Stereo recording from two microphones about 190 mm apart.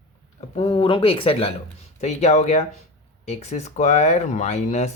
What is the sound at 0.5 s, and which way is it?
Speech, 30° left (ahead or behind).